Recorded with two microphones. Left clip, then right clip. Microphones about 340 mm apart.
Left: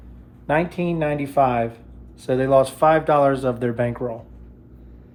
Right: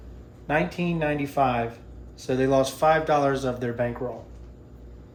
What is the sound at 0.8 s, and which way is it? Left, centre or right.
Speech, centre.